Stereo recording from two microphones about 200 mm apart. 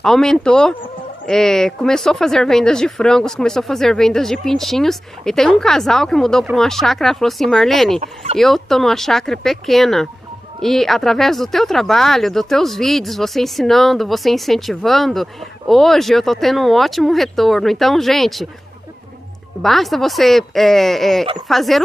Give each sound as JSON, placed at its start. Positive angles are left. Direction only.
{"t": 0.0, "sound": "speech", "side_deg": 0}
{"t": 8.0, "sound": "speech", "side_deg": -30}
{"t": 8.4, "sound": "speech", "side_deg": 0}
{"t": 19.6, "sound": "speech", "side_deg": 0}